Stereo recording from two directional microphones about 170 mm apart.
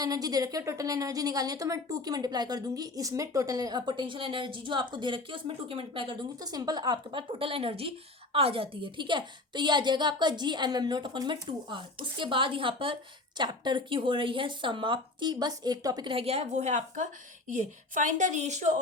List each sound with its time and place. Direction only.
0.0 s a woman's voice: 20° right (ahead or behind); by 18.8 s 40° right (ahead or behind)